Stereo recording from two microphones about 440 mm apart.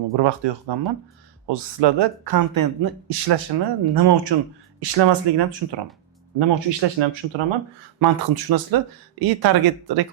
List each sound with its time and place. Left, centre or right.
0.2 s speech: right
4.9 s speech: right
7.9 s speech: right